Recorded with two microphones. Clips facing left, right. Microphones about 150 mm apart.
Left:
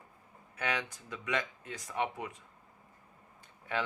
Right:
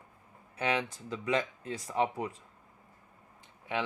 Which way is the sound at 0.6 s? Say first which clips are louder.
Right 4 dB; 25° right (ahead or behind).